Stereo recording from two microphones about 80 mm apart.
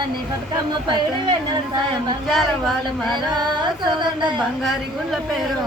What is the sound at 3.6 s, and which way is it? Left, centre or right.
Speech, right.